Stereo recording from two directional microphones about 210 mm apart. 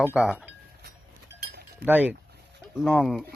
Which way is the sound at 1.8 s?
10° right (ahead or behind).